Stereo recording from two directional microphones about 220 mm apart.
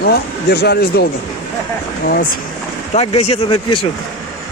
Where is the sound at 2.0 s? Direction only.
40° left (ahead or behind).